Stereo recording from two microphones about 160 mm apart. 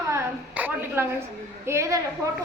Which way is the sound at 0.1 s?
10° right (ahead or behind).